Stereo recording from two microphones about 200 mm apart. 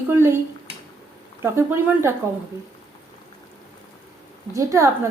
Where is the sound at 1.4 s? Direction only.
15° right (ahead or behind).